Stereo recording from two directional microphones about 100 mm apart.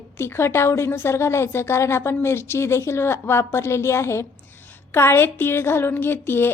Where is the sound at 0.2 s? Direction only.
25° left (ahead or behind).